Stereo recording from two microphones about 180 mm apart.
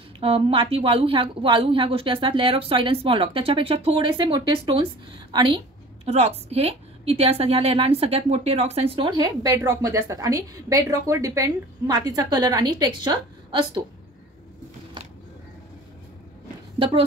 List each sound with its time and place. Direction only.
0.2 s a woman's voice: 30° right (ahead or behind)
16.7 s speech: 30° right (ahead or behind)